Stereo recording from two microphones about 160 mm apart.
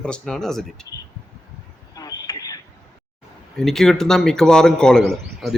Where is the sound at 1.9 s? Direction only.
25° left (ahead or behind).